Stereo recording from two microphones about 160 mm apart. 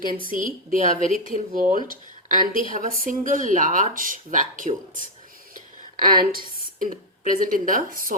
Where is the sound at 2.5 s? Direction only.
35° left (ahead or behind).